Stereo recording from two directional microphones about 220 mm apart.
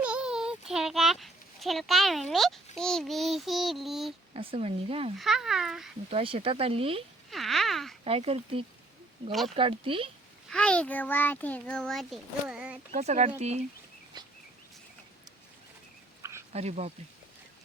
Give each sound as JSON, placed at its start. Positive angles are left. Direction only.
{"t": 0.0, "sound": "a child's voice", "side_deg": -5}
{"t": 4.4, "sound": "speech", "side_deg": -25}
{"t": 5.1, "sound": "a child's voice", "side_deg": 0}
{"t": 6.1, "sound": "speech", "side_deg": -25}
{"t": 7.3, "sound": "a child's voice", "side_deg": 0}
{"t": 8.0, "sound": "speech", "side_deg": -25}
{"t": 10.5, "sound": "a child's voice", "side_deg": 5}
{"t": 12.9, "sound": "speech", "side_deg": -30}
{"t": 16.5, "sound": "speech", "side_deg": -30}